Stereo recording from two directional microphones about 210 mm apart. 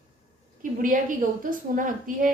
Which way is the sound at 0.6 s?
40° right (ahead or behind).